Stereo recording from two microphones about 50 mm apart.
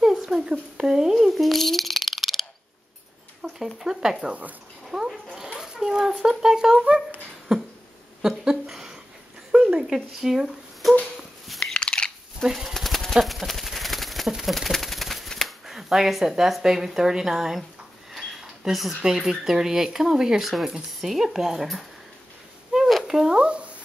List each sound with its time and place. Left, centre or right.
0.0 s a sound: centre
3.4 s speech: centre
4.2 s speech: right
4.8 s dog: centre
5.6 s speech: centre
9.5 s a sound: centre
11.6 s biting: centre
12.4 s speech: centre
12.7 s bird: centre
18.1 s a sound: centre
19.0 s speech: centre
22.7 s a sound: centre